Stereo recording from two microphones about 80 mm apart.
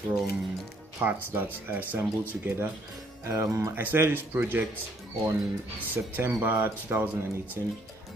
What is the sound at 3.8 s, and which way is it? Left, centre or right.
Speech, right.